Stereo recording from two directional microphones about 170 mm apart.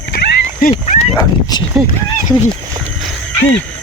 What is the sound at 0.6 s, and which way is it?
Speech, 45° left (ahead or behind).